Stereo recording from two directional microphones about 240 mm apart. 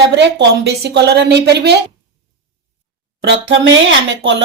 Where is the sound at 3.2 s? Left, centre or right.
Right.